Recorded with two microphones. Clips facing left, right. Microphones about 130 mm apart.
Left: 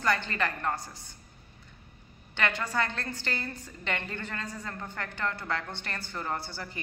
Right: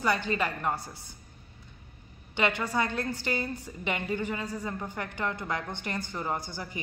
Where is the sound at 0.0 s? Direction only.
15° right (ahead or behind).